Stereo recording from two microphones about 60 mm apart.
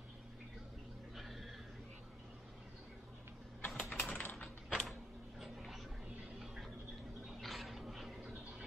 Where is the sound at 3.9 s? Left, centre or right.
Left.